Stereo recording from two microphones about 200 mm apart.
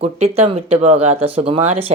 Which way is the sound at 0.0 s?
30° right (ahead or behind).